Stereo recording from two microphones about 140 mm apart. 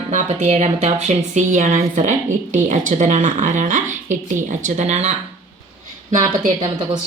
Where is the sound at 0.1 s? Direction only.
55° right (ahead or behind).